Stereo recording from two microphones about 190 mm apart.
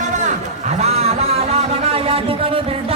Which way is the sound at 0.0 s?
40° right (ahead or behind).